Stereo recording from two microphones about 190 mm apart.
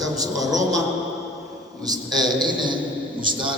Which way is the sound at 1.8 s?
20° right (ahead or behind).